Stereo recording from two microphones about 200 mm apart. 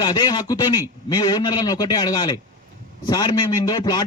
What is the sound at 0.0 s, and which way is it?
A man's voice, 20° left (ahead or behind).